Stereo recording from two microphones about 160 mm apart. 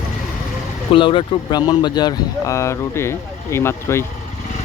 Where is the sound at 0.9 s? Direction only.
30° left (ahead or behind); by 4.0 s 15° left (ahead or behind).